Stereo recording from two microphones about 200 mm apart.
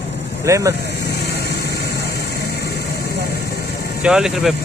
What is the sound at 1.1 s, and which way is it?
Vehicle, 55° left (ahead or behind).